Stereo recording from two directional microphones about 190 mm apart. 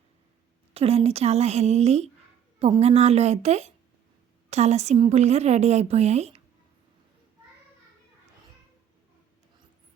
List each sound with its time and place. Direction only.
0.7 s a woman's voice: 30° right (ahead or behind)